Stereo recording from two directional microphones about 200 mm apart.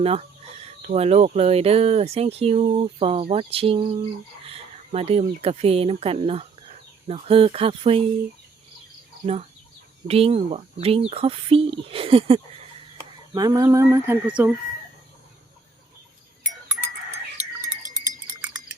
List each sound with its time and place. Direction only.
0.0 s speech: 30° right (ahead or behind)
10.1 s speech: 30° right (ahead or behind)
13.0 s speech: 20° right (ahead or behind)
16.4 s goat: 10° right (ahead or behind)